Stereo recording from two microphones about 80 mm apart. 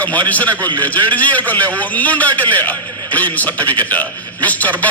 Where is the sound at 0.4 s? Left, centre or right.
Right.